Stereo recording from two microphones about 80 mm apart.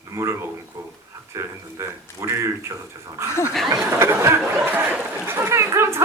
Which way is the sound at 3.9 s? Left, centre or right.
Right.